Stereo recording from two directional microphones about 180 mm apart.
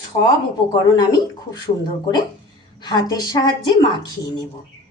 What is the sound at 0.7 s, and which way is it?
Speech, 20° left (ahead or behind).